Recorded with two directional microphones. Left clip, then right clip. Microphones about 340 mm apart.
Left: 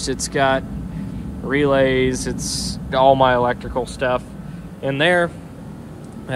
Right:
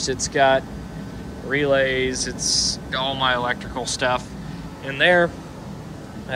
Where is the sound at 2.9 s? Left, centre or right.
Centre.